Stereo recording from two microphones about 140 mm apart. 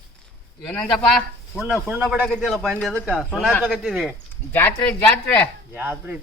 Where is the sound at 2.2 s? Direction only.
5° left (ahead or behind).